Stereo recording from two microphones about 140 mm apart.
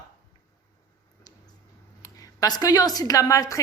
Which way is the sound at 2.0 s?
25° left (ahead or behind).